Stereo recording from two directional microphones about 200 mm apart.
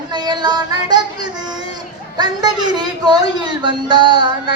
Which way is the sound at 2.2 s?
20° right (ahead or behind).